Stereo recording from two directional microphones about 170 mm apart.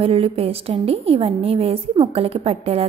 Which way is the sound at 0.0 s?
35° right (ahead or behind).